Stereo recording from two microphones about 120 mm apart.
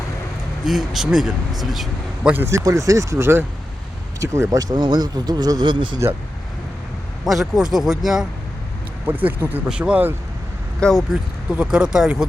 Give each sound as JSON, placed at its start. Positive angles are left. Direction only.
{"t": 0.6, "sound": "a man's voice", "side_deg": -5}
{"t": 2.3, "sound": "speech", "side_deg": -20}
{"t": 7.3, "sound": "a man's voice", "side_deg": -5}
{"t": 9.0, "sound": "speech", "side_deg": -15}
{"t": 10.8, "sound": "speech", "side_deg": 5}
{"t": 11.1, "sound": "speech", "side_deg": -10}